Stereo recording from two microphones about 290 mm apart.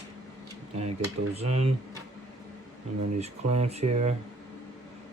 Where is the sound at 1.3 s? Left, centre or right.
Right.